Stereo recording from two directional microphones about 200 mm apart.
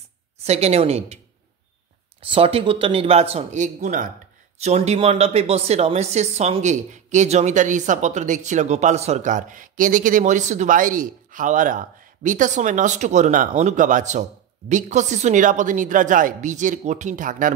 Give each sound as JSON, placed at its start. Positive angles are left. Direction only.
{"t": 0.4, "sound": "speech", "side_deg": -35}
{"t": 2.3, "sound": "speech", "side_deg": -25}